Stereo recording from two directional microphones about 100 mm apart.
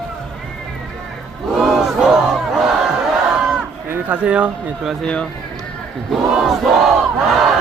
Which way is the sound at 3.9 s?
15° right (ahead or behind).